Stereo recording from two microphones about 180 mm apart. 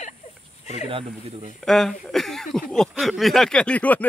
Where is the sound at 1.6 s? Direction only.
Centre (ahead or behind).